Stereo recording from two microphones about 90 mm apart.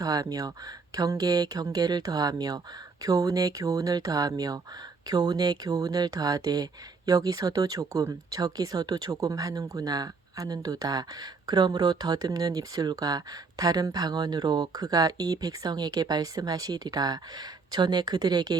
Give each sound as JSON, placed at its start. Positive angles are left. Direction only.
{"t": 0.0, "sound": "speech", "side_deg": -45}